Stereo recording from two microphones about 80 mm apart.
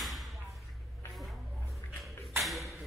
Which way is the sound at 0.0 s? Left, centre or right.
Centre.